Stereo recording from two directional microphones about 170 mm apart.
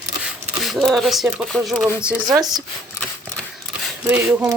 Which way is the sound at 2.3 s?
20° right (ahead or behind).